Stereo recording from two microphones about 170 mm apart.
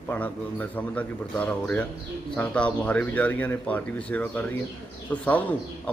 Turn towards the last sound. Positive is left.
turn(degrees=10)  # may be behind; listen again after turning